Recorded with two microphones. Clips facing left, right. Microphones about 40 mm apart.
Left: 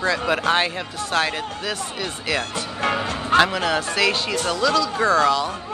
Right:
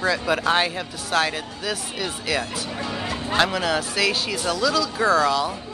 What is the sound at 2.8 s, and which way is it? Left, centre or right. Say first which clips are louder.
Music: left 7 dB; left.